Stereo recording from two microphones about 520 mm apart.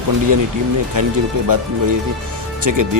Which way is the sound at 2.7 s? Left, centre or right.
Right.